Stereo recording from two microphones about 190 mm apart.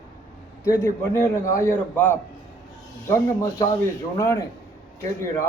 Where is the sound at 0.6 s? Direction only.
15° left (ahead or behind).